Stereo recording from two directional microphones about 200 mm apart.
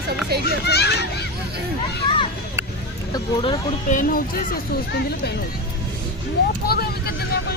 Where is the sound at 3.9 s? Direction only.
45° left (ahead or behind).